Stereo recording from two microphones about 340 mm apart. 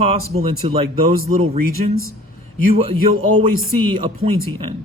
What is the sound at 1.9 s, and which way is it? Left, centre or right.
Speech, right.